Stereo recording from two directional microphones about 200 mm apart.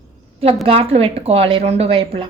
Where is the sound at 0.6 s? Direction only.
30° right (ahead or behind).